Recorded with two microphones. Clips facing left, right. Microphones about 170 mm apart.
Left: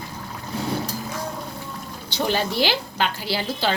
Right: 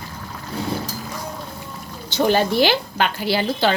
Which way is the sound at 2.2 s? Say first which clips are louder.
Right 5 dB; 50° right (ahead or behind).